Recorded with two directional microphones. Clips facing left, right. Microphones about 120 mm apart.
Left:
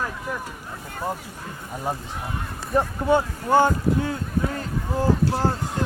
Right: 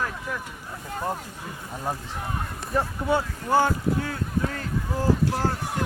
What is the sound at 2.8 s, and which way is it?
Speech, 25° left (ahead or behind).